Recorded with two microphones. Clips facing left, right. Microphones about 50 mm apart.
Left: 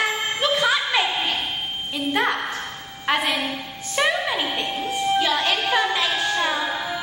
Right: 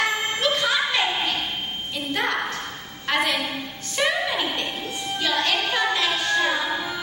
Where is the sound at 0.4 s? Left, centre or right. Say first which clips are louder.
Left 3 dB; centre.